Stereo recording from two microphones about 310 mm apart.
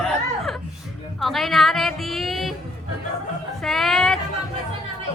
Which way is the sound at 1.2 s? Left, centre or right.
Centre.